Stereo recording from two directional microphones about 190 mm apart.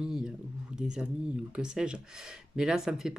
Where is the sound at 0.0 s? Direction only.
5° right (ahead or behind).